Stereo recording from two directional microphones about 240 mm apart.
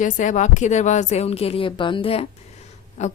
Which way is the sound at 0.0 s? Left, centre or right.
Left.